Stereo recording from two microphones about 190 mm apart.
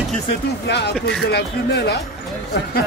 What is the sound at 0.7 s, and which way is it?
Speech, 60° left (ahead or behind).